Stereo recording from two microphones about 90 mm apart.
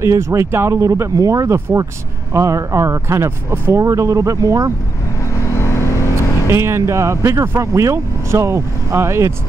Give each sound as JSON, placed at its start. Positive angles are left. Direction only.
{"t": 0.0, "sound": "speech", "side_deg": -35}
{"t": 5.2, "sound": "vehicle", "side_deg": 30}
{"t": 6.5, "sound": "speech", "side_deg": -30}